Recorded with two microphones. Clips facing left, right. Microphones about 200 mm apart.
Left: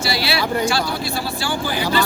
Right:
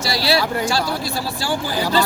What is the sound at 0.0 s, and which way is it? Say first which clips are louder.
Speech: right 2 dB; 40° right (ahead or behind).